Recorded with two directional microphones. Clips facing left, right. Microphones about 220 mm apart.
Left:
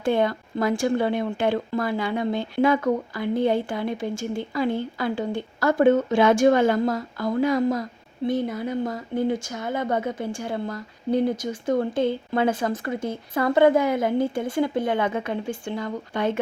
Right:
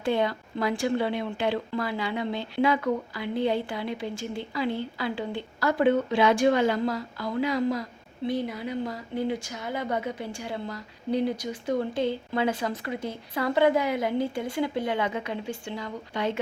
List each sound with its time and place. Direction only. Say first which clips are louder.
0.0 s a woman's voice: left 4 dB; 50° left (ahead or behind)